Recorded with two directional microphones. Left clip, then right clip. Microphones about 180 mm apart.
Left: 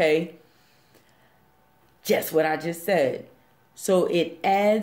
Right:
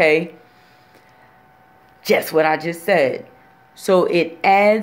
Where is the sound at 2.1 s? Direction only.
15° left (ahead or behind).